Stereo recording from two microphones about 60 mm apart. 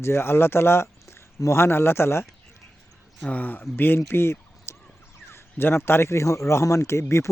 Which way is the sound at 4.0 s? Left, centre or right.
Left.